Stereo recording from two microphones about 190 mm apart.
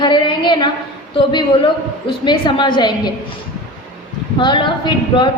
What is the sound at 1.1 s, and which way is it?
A woman's voice, 25° left (ahead or behind).